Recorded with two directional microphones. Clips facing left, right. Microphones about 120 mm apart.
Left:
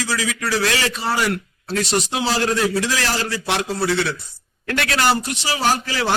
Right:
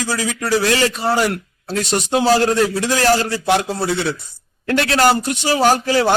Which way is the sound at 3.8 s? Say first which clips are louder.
Right 1 dB; 20° right (ahead or behind).